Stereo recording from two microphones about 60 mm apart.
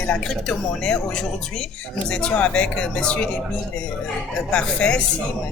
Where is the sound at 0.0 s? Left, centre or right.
Centre.